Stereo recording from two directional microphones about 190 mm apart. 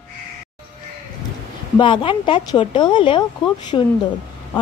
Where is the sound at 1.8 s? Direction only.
25° left (ahead or behind).